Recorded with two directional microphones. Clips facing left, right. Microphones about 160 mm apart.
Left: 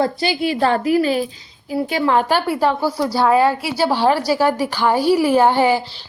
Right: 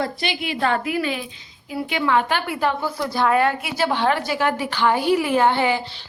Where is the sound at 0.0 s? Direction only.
30° left (ahead or behind).